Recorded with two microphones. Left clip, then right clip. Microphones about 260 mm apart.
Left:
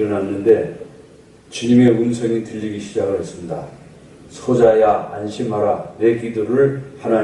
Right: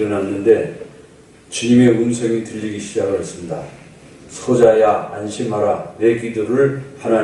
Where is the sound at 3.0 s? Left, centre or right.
Centre.